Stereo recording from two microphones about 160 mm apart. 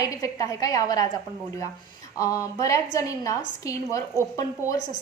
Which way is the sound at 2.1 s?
20° left (ahead or behind).